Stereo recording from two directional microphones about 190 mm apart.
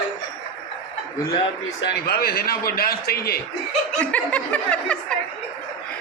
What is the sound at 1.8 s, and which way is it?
A man's voice, 60° left (ahead or behind).